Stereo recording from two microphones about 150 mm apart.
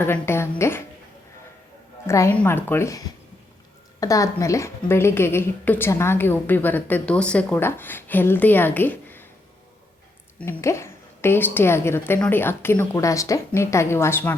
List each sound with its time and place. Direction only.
0.0 s a woman's voice: 15° left (ahead or behind)
2.0 s a woman's voice: 20° left (ahead or behind)
4.0 s a woman's voice: 20° left (ahead or behind)
10.3 s a woman's voice: 15° left (ahead or behind)